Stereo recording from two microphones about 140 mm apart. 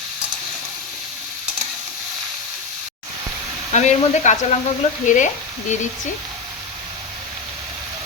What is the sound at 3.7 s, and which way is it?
Speech, 55° left (ahead or behind).